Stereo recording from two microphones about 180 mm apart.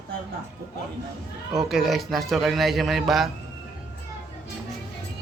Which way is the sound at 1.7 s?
Centre (ahead or behind).